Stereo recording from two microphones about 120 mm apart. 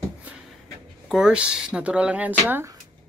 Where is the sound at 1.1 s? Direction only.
5° right (ahead or behind).